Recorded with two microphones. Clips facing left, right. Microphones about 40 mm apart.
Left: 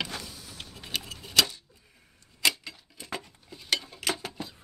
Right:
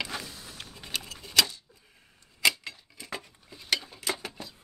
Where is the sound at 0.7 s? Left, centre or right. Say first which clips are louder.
Left 2 dB; centre.